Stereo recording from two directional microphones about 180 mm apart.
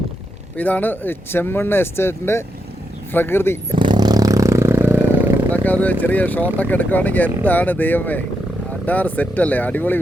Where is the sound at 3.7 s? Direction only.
25° right (ahead or behind).